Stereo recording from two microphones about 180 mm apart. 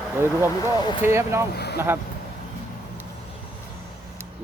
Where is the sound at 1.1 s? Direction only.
15° right (ahead or behind).